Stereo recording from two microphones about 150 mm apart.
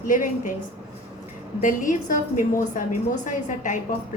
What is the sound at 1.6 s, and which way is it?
A woman's voice, 60° left (ahead or behind).